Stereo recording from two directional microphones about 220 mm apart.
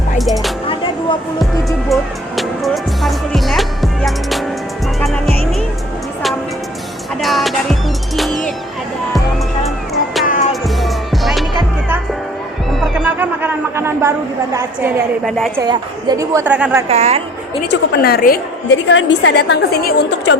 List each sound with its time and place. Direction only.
0.2 s music: centre (ahead or behind)
1.9 s music: centre (ahead or behind)
7.2 s music: centre (ahead or behind)
9.6 s music: centre (ahead or behind)
10.2 s music: 35° left (ahead or behind)
10.5 s music: centre (ahead or behind)
12.8 s music: 5° right (ahead or behind)
14.5 s a woman's voice: 10° right (ahead or behind)
15.5 s a woman's voice: 20° right (ahead or behind)
16.9 s a woman's voice: 30° right (ahead or behind)
17.7 s a woman's voice: 45° left (ahead or behind)
18.9 s a woman's voice: 55° left (ahead or behind)